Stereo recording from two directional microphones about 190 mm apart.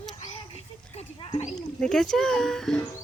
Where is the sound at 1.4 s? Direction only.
Centre (ahead or behind).